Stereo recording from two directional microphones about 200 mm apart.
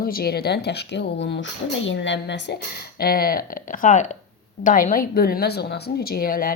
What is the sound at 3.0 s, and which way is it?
Speech, 50° left (ahead or behind).